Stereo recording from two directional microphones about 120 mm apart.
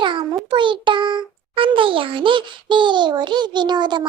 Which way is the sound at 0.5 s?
40° right (ahead or behind).